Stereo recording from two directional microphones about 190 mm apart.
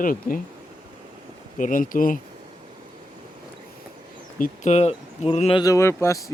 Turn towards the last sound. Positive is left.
turn(degrees=15)  # may be behind; listen again after turning